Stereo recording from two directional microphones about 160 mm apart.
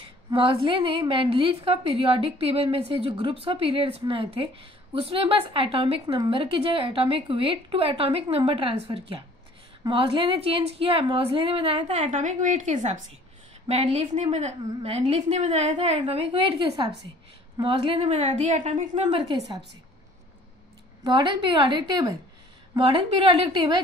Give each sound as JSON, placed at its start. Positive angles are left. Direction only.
{"t": 0.0, "sound": "a woman's voice", "side_deg": -35}
{"t": 19.2, "sound": "a woman's voice", "side_deg": -25}
{"t": 21.0, "sound": "a woman's voice", "side_deg": -30}